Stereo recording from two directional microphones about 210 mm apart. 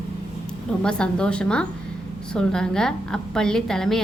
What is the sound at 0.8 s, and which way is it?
A woman's voice, 5° left (ahead or behind).